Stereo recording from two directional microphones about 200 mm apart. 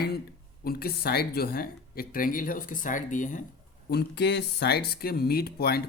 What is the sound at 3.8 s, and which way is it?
Speech, 55° left (ahead or behind).